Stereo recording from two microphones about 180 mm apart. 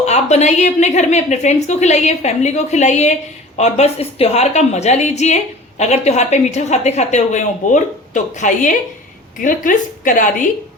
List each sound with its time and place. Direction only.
0.0 s a woman's voice: 40° left (ahead or behind)